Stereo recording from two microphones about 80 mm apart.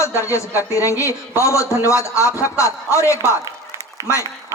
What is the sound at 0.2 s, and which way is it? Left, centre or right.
A man's voice, left.